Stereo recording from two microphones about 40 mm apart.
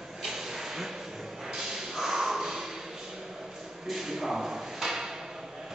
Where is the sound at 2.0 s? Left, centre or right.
Centre.